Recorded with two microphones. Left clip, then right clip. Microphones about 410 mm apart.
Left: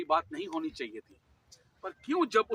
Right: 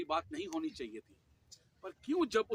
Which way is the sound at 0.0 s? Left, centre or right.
Right.